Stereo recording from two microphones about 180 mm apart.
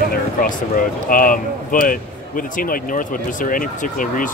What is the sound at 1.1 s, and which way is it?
Speech, 50° left (ahead or behind).